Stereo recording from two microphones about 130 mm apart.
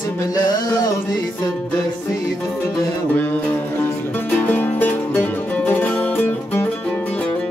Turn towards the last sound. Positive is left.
turn(degrees=15)  # may be behind; listen again after turning